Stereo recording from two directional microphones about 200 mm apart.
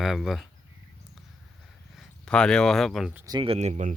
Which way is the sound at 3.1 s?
20° right (ahead or behind).